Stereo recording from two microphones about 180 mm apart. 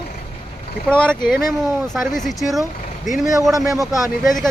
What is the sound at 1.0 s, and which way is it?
Speech, 5° left (ahead or behind).